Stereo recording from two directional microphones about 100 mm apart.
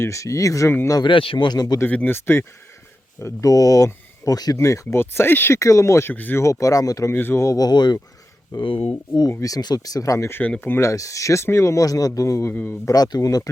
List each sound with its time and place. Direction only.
0.0 s speech: 30° left (ahead or behind)
1.0 s speech: 65° left (ahead or behind)
1.5 s speech: 40° left (ahead or behind)
1.8 s speech: 20° left (ahead or behind)
6.4 s speech: 35° left (ahead or behind)
7.1 s speech: 20° left (ahead or behind); by 7.9 s 45° left (ahead or behind)
8.5 s speech: 60° left (ahead or behind)
9.3 s speech: 35° left (ahead or behind); by 10.8 s 20° left (ahead or behind)
10.8 s speech: 35° left (ahead or behind)
12.9 s speech: 40° left (ahead or behind)